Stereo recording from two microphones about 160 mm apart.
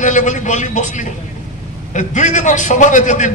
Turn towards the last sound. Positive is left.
turn(degrees=50)  # may be behind; listen again after turning